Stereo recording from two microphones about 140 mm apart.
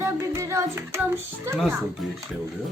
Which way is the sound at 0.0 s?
20° right (ahead or behind).